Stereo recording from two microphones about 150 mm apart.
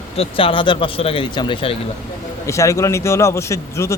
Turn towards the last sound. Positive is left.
turn(degrees=20)  # may be behind; listen again after turning